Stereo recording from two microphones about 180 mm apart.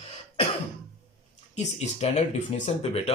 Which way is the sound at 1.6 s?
40° left (ahead or behind).